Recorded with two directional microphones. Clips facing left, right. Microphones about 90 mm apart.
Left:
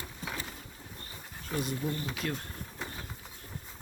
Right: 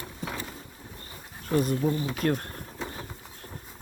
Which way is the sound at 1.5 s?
45° right (ahead or behind).